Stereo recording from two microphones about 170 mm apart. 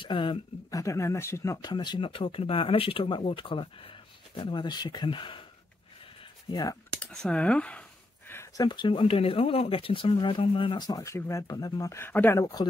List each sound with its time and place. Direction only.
0.0 s speech: 30° left (ahead or behind)
6.5 s speech: 20° left (ahead or behind)
7.0 s speech: 5° left (ahead or behind)
8.3 s a sound: 15° left (ahead or behind)
8.6 s speech: 25° left (ahead or behind)